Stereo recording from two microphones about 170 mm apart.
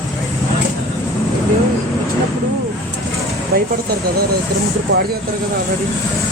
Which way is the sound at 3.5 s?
65° right (ahead or behind).